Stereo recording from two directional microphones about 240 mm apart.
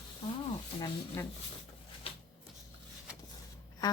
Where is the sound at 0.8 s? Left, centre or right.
Centre.